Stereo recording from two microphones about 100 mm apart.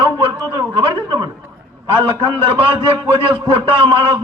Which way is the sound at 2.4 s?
65° right (ahead or behind).